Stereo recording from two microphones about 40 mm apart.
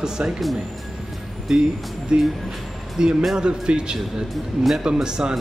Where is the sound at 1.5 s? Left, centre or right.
Centre.